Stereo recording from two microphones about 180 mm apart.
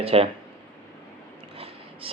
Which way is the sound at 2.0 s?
30° right (ahead or behind).